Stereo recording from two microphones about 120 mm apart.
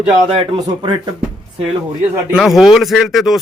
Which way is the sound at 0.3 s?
45° right (ahead or behind).